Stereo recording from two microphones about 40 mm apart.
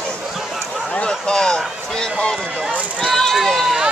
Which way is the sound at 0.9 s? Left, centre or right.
Left.